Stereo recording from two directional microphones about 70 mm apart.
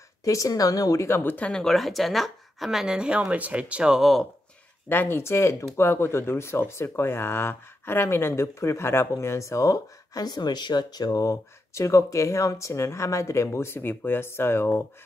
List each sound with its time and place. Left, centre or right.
0.2 s speech: left
1.0 s speech: left
1.3 s speech: centre
1.6 s speech: centre
4.8 s speech: left
10.2 s speech: left